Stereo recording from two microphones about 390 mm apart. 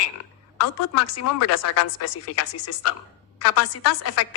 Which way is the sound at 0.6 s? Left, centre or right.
Left.